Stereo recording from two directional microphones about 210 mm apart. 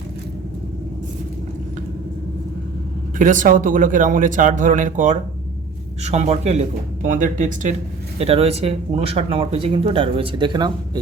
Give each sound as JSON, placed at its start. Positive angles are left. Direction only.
{"t": 3.2, "sound": "a man's voice", "side_deg": -40}